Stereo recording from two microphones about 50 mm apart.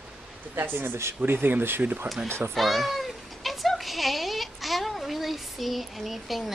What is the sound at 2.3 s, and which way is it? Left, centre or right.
Speech, right.